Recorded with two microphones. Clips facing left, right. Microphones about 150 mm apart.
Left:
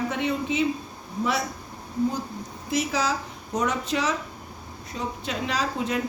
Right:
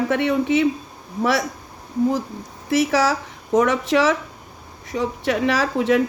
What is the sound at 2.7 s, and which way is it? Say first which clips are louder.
Speech: right 7 dB; 75° right (ahead or behind).